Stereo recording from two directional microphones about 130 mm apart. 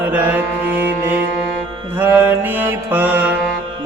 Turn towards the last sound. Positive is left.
turn(degrees=-15)  # may be behind; listen again after turning